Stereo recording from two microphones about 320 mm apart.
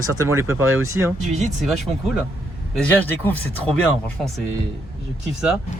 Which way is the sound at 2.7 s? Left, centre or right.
Centre.